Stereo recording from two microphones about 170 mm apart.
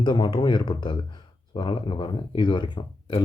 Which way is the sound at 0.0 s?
25° left (ahead or behind).